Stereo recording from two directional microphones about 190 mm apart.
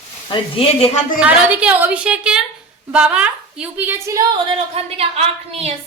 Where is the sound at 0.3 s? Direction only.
25° left (ahead or behind).